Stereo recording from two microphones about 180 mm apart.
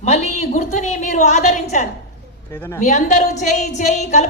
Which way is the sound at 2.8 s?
45° left (ahead or behind).